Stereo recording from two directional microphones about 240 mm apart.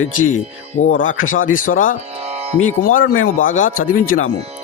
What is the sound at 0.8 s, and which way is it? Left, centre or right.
Speech, left.